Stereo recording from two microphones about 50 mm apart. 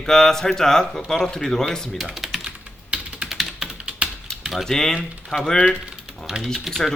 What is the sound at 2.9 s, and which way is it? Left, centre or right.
Computer keyboard, right.